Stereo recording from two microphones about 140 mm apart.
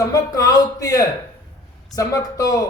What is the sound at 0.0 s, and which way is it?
A man's voice, 25° left (ahead or behind).